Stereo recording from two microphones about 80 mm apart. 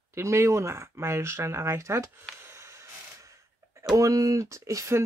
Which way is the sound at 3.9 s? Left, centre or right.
Right.